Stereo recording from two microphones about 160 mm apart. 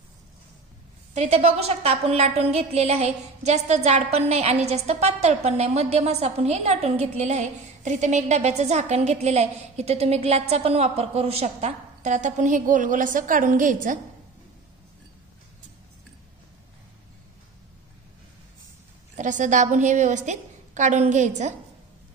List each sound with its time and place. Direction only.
1.1 s a woman's voice: 45° right (ahead or behind)
19.1 s a woman's voice: 50° right (ahead or behind)